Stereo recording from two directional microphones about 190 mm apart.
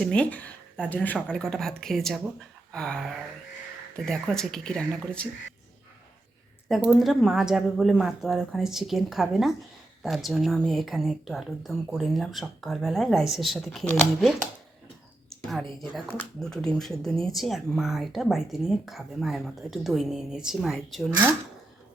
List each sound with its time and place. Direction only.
0.0 s speech: 5° left (ahead or behind)
6.7 s speech: centre (ahead or behind)
16.0 s speech: 5° left (ahead or behind)